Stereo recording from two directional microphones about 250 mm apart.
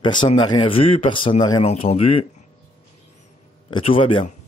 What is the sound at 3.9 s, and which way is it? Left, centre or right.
Speech, left.